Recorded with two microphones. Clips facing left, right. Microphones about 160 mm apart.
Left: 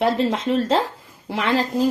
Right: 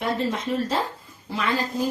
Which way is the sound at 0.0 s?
90° left.